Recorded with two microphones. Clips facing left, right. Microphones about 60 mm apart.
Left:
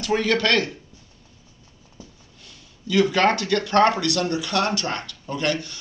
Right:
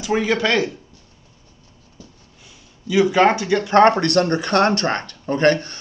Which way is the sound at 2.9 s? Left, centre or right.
Centre.